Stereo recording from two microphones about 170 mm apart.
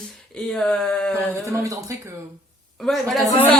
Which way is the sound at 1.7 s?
20° right (ahead or behind).